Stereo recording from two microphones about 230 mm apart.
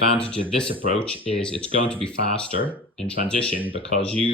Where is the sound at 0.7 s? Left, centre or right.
Right.